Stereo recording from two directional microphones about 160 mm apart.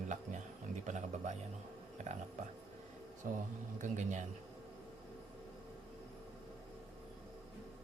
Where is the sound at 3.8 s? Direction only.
50° right (ahead or behind).